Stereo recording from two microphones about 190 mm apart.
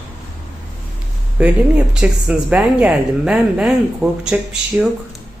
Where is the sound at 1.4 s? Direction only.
5° right (ahead or behind).